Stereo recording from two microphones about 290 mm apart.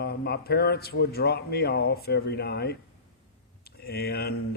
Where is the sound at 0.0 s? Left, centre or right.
Left.